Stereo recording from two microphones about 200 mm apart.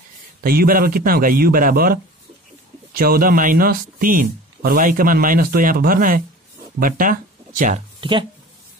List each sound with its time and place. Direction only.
0.4 s speech: 45° right (ahead or behind)
8.0 s speech: 25° right (ahead or behind)